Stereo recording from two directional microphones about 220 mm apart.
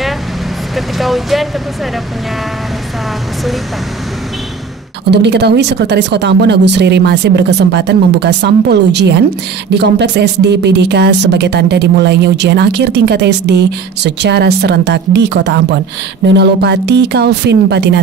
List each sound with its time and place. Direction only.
0.7 s speech: centre (ahead or behind)
5.1 s speech: 50° right (ahead or behind)